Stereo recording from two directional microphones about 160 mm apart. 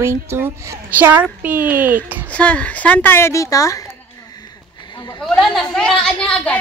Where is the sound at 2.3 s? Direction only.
10° left (ahead or behind).